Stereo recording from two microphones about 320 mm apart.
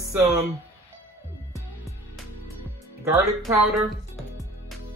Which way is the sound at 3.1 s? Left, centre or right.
Centre.